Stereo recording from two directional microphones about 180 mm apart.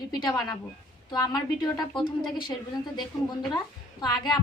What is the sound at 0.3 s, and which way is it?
A woman's voice, 20° left (ahead or behind).